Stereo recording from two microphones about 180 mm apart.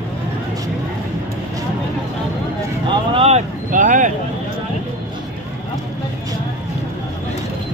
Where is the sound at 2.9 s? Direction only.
35° right (ahead or behind).